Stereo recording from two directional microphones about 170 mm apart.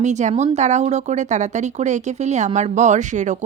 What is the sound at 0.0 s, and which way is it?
A woman's voice, 45° right (ahead or behind).